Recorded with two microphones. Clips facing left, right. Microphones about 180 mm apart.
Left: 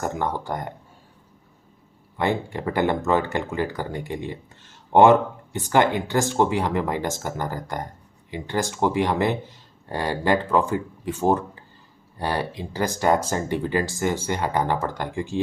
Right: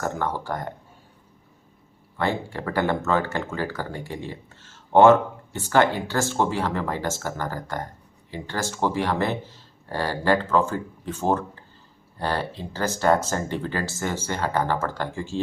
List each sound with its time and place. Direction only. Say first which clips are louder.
0.0 s speech: left 1 dB; 15° left (ahead or behind)
2.1 s speech: left 2 dB; 15° left (ahead or behind)